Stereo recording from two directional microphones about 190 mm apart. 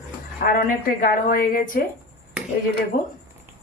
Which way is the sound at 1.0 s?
45° left (ahead or behind).